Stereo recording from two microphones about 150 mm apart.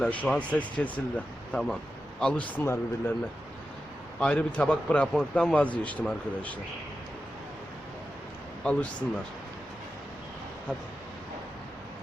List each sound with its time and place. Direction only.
0.0 s speech: 10° left (ahead or behind)
4.2 s speech: 5° left (ahead or behind)
8.6 s speech: 10° left (ahead or behind)